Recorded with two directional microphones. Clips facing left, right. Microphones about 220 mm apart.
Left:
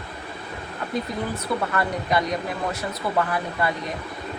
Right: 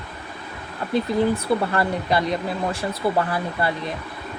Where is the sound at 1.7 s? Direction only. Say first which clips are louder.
Right 2 dB; 30° right (ahead or behind).